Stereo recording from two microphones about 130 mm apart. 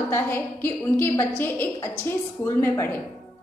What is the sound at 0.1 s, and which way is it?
A woman's voice, 15° left (ahead or behind).